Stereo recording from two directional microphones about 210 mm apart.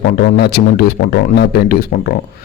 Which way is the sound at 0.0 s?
50° left (ahead or behind).